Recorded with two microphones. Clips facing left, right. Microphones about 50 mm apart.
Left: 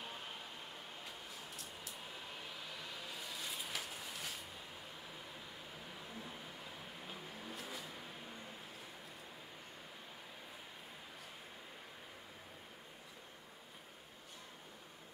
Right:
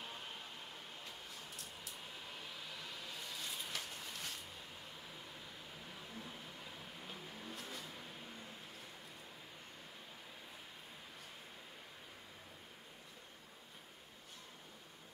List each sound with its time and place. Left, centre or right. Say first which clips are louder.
0.0 s vehicle: left 1 dB; centre
5.9 s vehicle: left 1 dB; centre